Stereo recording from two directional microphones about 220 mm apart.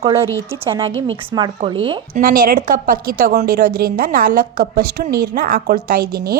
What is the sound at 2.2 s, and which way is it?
A woman's voice, 40° right (ahead or behind).